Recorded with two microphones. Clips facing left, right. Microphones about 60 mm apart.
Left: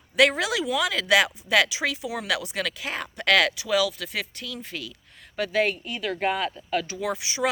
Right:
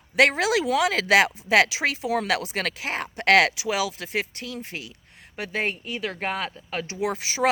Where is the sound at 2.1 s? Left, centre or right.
Right.